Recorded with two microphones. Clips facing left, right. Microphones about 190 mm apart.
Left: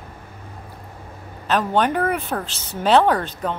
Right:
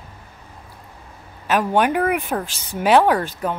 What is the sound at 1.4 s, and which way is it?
Speech, 10° right (ahead or behind).